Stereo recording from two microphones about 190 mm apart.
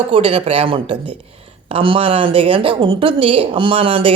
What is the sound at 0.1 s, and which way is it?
Speech, 30° right (ahead or behind).